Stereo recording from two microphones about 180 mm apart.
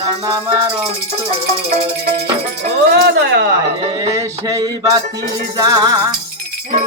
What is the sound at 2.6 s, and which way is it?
Speech, 65° right (ahead or behind).